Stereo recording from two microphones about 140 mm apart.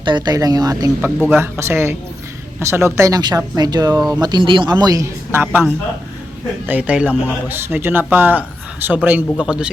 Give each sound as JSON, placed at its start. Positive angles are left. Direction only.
{"t": 0.0, "sound": "speech", "side_deg": -30}
{"t": 6.7, "sound": "a man's voice", "side_deg": -10}